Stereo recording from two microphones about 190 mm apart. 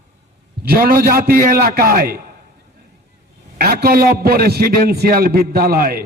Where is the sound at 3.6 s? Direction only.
55° right (ahead or behind).